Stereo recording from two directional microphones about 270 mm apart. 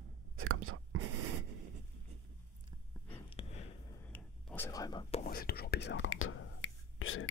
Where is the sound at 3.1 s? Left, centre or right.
Left.